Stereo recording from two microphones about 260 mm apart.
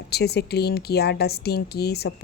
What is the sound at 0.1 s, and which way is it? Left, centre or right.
A woman's voice, left.